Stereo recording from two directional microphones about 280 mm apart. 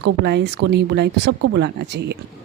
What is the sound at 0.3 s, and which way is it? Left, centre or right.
Speech, right.